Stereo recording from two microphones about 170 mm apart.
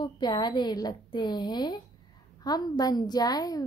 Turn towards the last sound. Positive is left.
turn(degrees=20)  # may be behind; listen again after turning